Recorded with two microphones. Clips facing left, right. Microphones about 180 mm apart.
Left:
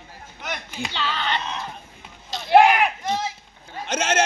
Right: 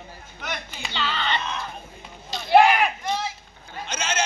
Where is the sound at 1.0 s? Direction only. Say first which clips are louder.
Even; 10° left (ahead or behind).